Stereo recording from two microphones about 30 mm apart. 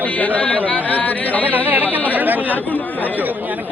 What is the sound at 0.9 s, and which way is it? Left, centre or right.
Speech, left.